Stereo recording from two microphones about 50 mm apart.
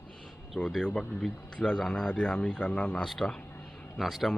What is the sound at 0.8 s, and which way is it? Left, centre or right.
Speech, centre.